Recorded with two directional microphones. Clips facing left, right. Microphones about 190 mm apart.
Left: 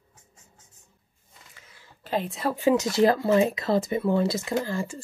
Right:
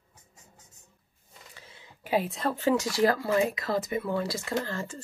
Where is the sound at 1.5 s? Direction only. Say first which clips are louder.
Right 4 dB; 35° right (ahead or behind).